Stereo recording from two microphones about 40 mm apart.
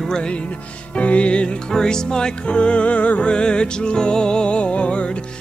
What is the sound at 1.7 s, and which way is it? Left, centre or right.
Music, centre.